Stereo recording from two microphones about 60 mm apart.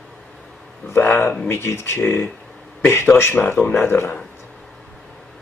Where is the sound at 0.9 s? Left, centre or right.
Left.